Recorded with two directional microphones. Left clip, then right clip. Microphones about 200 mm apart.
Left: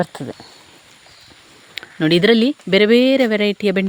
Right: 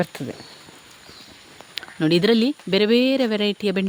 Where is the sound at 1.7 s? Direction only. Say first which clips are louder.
Left 4 dB; 15° left (ahead or behind).